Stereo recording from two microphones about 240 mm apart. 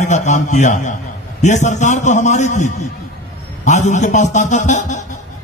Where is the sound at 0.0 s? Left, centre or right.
Left.